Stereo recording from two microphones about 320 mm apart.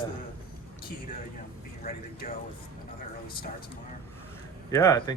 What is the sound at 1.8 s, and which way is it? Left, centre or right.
Speech, left.